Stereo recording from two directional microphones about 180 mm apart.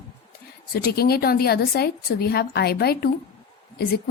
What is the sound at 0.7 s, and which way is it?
A woman's voice, 60° left (ahead or behind).